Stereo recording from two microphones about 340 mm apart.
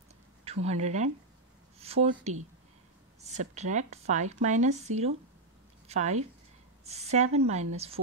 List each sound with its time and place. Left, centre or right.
0.7 s a woman's voice: centre